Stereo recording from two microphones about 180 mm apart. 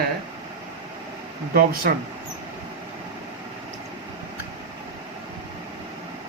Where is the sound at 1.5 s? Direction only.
55° right (ahead or behind).